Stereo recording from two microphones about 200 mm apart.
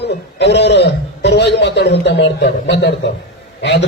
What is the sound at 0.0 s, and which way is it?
A man's voice, 55° left (ahead or behind).